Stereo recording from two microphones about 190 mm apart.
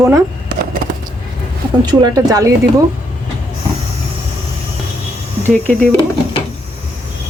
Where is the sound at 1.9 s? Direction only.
20° right (ahead or behind).